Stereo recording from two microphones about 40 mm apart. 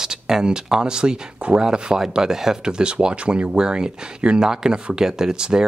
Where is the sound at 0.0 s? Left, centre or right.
Centre.